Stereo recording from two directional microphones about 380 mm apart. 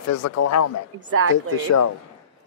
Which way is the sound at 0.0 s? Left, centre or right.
Left.